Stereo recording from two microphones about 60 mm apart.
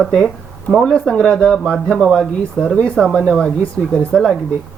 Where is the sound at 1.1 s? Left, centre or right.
Centre.